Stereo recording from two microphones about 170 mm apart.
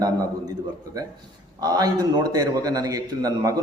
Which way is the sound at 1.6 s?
20° right (ahead or behind).